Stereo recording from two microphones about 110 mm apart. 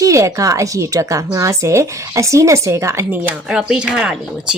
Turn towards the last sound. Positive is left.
turn(degrees=-10)  # may be behind; listen again after turning